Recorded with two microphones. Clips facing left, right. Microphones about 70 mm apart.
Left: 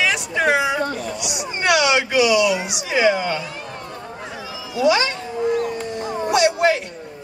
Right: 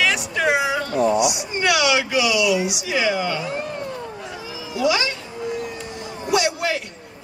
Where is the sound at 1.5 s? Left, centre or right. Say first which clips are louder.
Left 3 dB; left.